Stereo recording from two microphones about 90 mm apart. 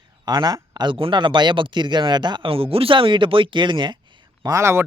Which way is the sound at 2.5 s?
90° right.